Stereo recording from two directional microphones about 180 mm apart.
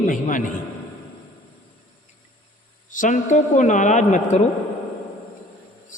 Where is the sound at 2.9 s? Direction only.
45° left (ahead or behind).